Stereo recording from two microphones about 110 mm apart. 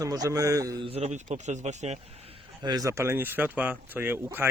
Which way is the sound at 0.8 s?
75° right (ahead or behind).